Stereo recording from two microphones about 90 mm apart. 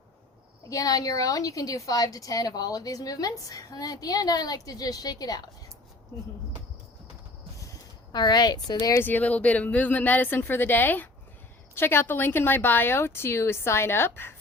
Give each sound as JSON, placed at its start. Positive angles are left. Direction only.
{"t": 0.7, "sound": "a woman's voice", "side_deg": 40}
{"t": 8.1, "sound": "a woman's voice", "side_deg": 50}
{"t": 9.0, "sound": "a woman's voice", "side_deg": 20}